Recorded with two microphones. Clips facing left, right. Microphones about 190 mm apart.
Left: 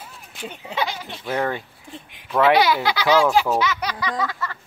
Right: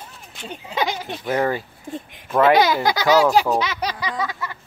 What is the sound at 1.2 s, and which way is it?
Speech, 5° right (ahead or behind).